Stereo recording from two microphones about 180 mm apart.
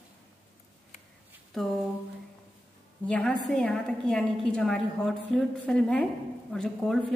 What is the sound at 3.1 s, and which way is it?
A woman's voice, 5° left (ahead or behind).